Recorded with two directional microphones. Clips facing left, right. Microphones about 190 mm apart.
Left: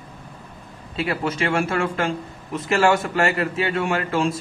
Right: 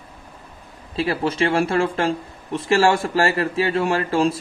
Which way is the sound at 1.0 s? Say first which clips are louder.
Right 3 dB; 30° right (ahead or behind).